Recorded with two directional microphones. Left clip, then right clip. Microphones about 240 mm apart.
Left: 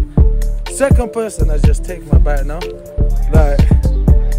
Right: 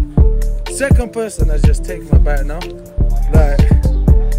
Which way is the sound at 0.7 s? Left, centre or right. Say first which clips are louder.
Left 3 dB; centre.